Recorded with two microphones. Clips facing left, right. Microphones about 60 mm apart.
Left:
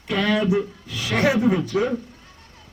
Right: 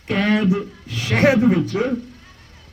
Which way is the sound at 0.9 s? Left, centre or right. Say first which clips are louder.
Right 4 dB; right.